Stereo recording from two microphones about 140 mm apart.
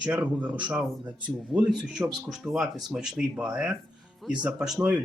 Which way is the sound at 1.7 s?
Centre (ahead or behind).